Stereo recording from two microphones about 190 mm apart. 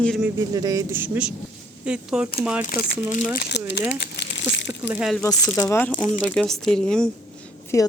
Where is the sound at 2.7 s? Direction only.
45° left (ahead or behind).